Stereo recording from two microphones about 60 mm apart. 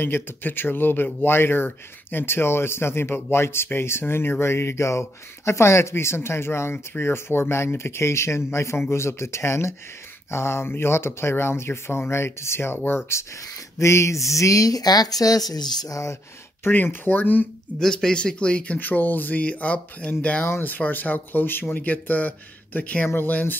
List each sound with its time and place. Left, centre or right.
0.0 s speech: left
13.7 s speech: left
16.6 s speech: left
17.7 s speech: centre
20.4 s speech: left
23.0 s speech: left